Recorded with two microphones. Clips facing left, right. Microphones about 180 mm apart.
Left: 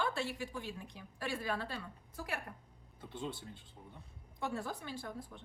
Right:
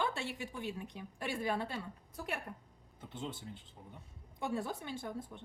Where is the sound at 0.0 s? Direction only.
20° right (ahead or behind).